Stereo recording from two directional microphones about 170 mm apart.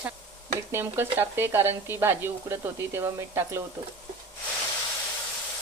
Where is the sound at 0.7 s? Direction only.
15° right (ahead or behind).